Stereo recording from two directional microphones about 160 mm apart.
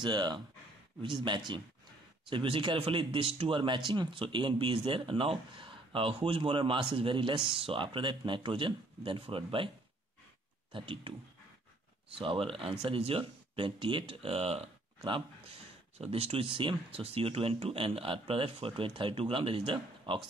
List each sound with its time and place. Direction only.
0.0 s speech: 25° right (ahead or behind)
10.7 s speech: 35° right (ahead or behind)
12.2 s speech: 30° right (ahead or behind)